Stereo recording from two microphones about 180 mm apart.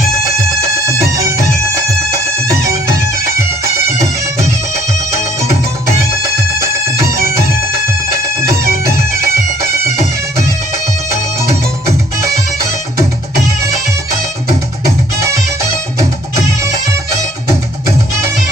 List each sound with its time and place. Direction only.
1.1 s music: 15° right (ahead or behind)
7.0 s bagpipes: 55° right (ahead or behind)
8.7 s bagpipes: 60° right (ahead or behind)
14.8 s music: 15° right (ahead or behind)